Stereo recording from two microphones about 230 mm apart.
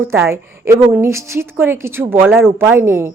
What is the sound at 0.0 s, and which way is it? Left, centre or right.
A woman's voice, centre.